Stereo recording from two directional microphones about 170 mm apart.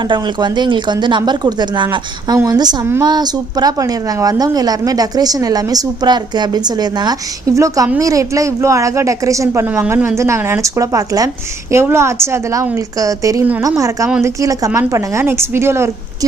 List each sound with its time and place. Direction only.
0.0 s a woman's voice: 25° right (ahead or behind)